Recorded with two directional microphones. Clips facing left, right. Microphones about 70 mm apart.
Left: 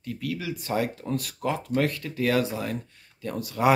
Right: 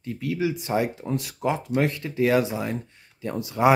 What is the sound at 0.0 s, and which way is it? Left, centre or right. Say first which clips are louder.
Speech: right 5 dB; right.